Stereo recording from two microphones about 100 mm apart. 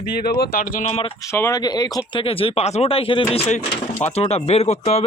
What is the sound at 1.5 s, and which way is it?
Speech, 40° left (ahead or behind).